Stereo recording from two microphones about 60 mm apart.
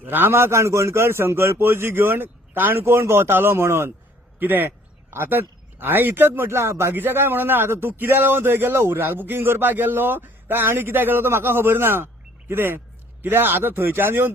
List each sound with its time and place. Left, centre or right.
0.0 s a man's voice: right
4.4 s a man's voice: right
6.9 s a man's voice: right